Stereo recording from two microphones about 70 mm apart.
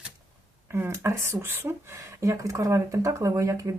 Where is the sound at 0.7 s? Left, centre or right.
Right.